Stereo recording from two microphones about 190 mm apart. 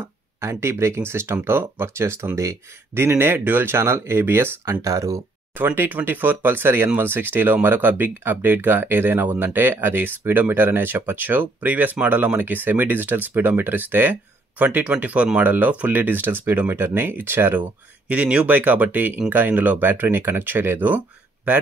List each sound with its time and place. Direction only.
0.4 s speech: 15° right (ahead or behind)